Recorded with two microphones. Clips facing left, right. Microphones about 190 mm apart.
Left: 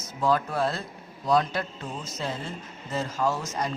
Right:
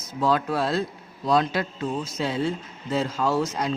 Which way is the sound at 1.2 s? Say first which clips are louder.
Right 2 dB; 90° right.